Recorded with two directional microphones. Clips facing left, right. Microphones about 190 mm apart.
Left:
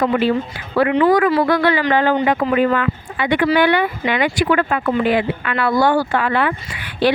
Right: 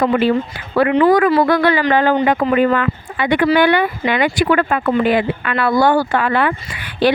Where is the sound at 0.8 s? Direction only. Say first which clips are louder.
Right 2 dB; 50° right (ahead or behind).